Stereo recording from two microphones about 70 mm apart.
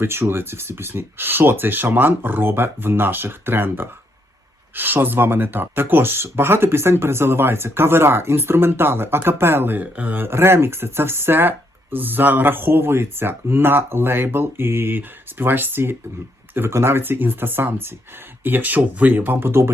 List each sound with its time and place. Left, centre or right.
0.0 s speech: right